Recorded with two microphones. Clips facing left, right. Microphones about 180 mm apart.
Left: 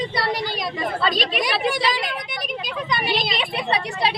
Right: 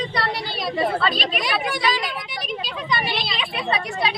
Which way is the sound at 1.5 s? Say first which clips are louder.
Left 2 dB; 25° left (ahead or behind).